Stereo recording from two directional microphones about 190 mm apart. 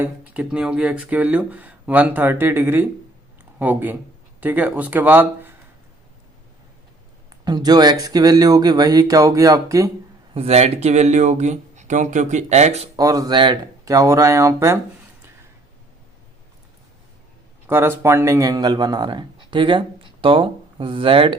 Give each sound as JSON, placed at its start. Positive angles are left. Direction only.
{"t": 0.0, "sound": "a man's voice", "side_deg": -5}
{"t": 7.4, "sound": "speech", "side_deg": -20}
{"t": 10.3, "sound": "speech", "side_deg": -35}
{"t": 13.0, "sound": "speech", "side_deg": -20}
{"t": 17.7, "sound": "speech", "side_deg": -10}